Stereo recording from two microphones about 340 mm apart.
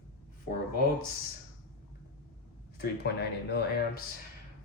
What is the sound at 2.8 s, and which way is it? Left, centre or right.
Speech, left.